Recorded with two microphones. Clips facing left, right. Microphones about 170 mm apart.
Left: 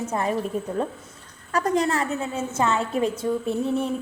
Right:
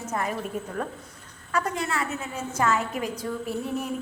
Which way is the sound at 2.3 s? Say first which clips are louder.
Left 1 dB; 25° left (ahead or behind).